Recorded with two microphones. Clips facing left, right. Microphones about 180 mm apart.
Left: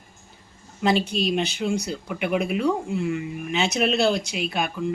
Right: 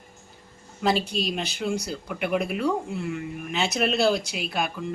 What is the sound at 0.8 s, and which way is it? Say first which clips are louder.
Speech: left 2 dB; centre (ahead or behind).